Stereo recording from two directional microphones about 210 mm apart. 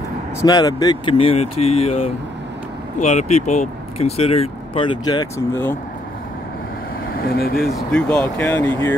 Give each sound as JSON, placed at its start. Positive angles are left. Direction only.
{"t": 0.4, "sound": "speech", "side_deg": 15}
{"t": 7.2, "sound": "speech", "side_deg": 45}
{"t": 7.7, "sound": "speech", "side_deg": 5}